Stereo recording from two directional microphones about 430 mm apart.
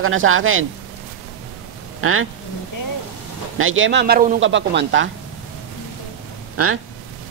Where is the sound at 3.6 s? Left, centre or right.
Right.